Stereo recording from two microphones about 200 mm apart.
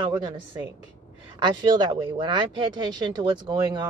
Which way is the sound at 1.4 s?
20° right (ahead or behind).